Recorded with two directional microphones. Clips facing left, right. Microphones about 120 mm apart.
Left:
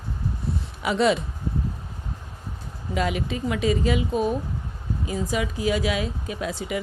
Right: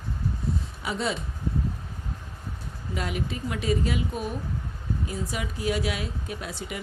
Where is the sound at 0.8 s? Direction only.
85° left.